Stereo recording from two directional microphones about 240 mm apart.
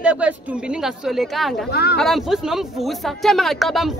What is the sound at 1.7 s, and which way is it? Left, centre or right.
Speech, left.